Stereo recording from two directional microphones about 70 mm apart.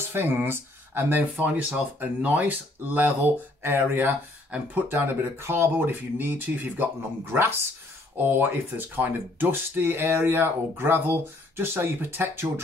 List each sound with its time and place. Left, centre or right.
0.1 s speech: right
1.3 s speech: centre